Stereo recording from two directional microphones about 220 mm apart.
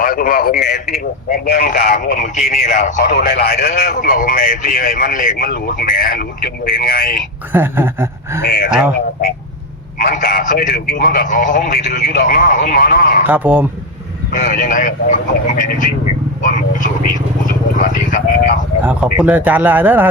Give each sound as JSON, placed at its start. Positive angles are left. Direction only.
{"t": 0.0, "sound": "a man's voice", "side_deg": 40}
{"t": 7.5, "sound": "speech", "side_deg": -10}
{"t": 8.4, "sound": "a man's voice", "side_deg": 45}
{"t": 10.0, "sound": "speech", "side_deg": 40}
{"t": 13.2, "sound": "speech", "side_deg": -10}
{"t": 14.4, "sound": "speech", "side_deg": 35}
{"t": 17.4, "sound": "vehicle", "side_deg": 35}
{"t": 18.8, "sound": "speech", "side_deg": -10}